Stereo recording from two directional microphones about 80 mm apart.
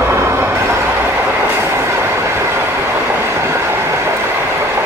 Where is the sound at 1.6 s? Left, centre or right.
Right.